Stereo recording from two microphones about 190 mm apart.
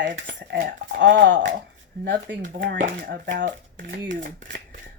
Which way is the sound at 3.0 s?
55° right (ahead or behind).